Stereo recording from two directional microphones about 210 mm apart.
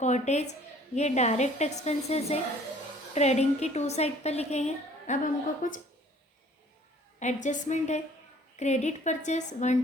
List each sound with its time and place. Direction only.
0.0 s a woman's voice: 30° left (ahead or behind)
7.2 s a woman's voice: 35° left (ahead or behind)